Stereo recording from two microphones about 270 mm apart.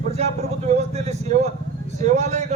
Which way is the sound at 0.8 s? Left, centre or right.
Right.